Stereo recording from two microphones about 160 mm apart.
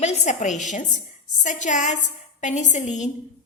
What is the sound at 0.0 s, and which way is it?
A woman's voice, 50° left (ahead or behind).